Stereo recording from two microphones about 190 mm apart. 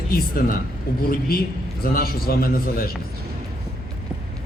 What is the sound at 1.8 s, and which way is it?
Speech, 50° left (ahead or behind).